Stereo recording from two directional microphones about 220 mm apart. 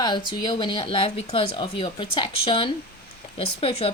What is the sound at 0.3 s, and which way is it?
Speech, 20° left (ahead or behind).